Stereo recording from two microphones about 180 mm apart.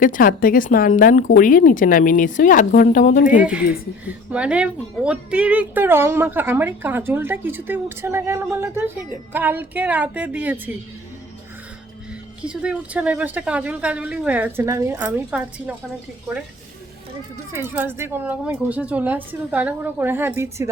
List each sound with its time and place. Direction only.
0.0 s speech: 50° left (ahead or behind)
4.3 s speech: 5° right (ahead or behind)
12.4 s speech: 5° right (ahead or behind)
17.5 s speech: 15° right (ahead or behind)